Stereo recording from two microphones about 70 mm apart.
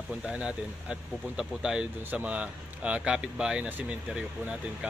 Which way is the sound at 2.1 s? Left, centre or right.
Right.